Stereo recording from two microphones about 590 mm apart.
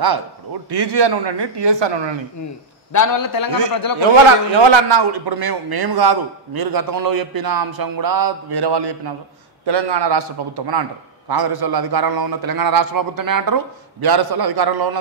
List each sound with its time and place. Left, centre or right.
0.7 s a man's voice: right
2.9 s a man's voice: left
4.6 s a man's voice: right